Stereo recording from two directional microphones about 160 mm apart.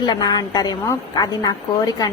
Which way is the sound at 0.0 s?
25° left (ahead or behind).